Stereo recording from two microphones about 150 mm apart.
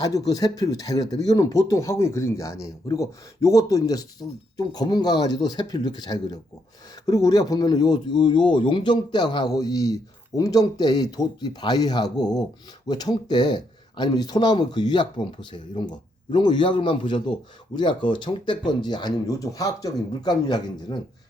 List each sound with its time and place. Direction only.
0.0 s speech: 25° left (ahead or behind)